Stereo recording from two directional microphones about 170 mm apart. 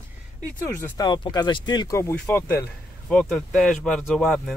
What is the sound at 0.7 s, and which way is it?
Speech, 15° left (ahead or behind).